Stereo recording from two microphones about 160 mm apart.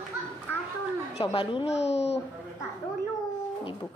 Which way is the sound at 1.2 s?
30° left (ahead or behind).